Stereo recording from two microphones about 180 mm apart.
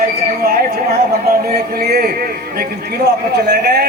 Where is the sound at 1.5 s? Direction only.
55° right (ahead or behind).